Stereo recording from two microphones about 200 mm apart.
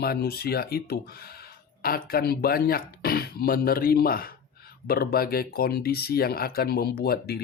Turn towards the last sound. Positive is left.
turn(degrees=50)  # may be behind; listen again after turning